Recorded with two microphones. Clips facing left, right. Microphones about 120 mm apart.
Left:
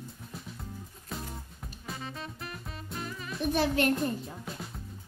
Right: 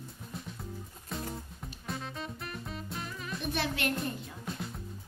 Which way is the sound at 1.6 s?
Centre (ahead or behind).